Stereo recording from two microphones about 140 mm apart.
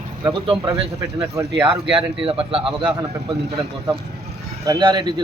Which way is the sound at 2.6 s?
10° right (ahead or behind).